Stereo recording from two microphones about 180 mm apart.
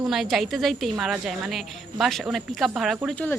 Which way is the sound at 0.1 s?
Centre (ahead or behind).